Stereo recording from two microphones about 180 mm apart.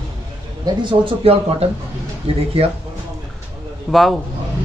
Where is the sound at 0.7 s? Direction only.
25° right (ahead or behind).